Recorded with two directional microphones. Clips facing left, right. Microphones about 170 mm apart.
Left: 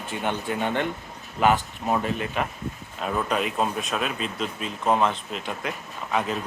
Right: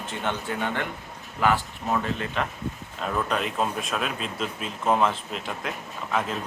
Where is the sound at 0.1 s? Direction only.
15° left (ahead or behind).